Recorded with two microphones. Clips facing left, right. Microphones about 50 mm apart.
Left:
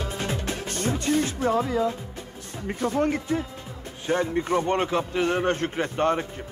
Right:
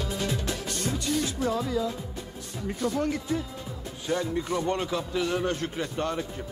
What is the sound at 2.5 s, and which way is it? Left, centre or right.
A man's voice, left.